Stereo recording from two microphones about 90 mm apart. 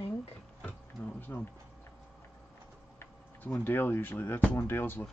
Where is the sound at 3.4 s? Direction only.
20° left (ahead or behind).